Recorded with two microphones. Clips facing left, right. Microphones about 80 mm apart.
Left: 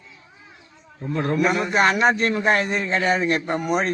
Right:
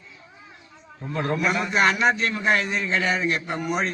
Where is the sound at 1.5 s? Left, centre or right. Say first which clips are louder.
Left 2 dB; left.